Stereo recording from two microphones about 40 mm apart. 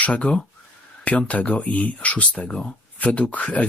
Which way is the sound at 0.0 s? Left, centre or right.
Left.